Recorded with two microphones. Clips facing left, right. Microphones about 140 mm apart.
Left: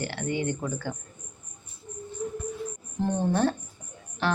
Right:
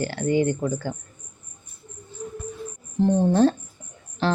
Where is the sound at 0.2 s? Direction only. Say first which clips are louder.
Right 9 dB; 35° right (ahead or behind).